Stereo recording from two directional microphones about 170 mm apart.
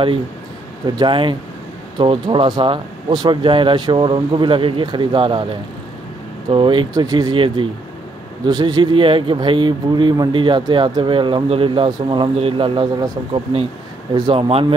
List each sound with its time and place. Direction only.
0.8 s speech: 25° right (ahead or behind)
6.5 s speech: 30° right (ahead or behind)